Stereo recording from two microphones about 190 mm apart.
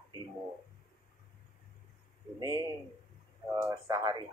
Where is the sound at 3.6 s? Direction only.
15° right (ahead or behind).